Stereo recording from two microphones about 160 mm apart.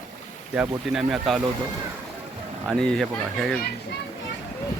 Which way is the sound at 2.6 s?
Centre (ahead or behind).